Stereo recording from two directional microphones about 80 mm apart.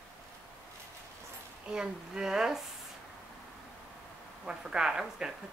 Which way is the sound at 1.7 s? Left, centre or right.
Centre.